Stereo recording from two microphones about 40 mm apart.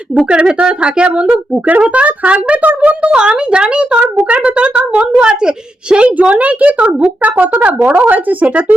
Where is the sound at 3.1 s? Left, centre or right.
Right.